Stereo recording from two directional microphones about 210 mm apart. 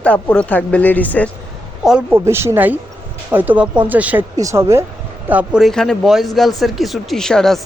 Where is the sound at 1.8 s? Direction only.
5° right (ahead or behind).